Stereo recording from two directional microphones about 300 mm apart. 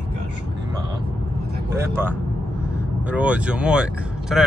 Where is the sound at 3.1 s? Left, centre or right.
Centre.